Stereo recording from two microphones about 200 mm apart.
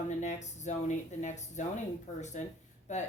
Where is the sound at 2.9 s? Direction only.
35° left (ahead or behind).